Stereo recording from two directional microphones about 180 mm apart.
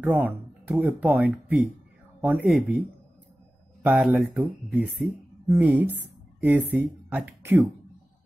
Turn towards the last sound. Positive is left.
turn(degrees=-10)  # may be behind; listen again after turning